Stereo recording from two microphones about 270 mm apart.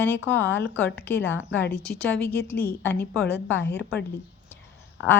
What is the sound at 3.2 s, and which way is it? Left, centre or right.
Speech, left.